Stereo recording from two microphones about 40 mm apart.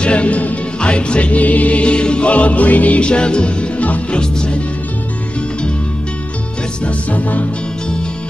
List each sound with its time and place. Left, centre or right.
0.0 s music: left
0.7 s music: left
3.1 s music: left
4.1 s music: left
6.8 s music: left